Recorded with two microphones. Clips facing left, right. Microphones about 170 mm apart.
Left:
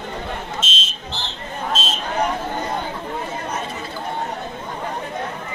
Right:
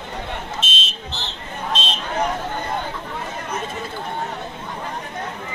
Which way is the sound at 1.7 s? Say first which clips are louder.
Even; 5° left (ahead or behind).